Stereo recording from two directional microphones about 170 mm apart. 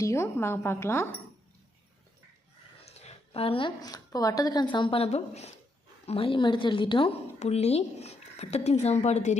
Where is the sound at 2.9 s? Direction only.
35° left (ahead or behind).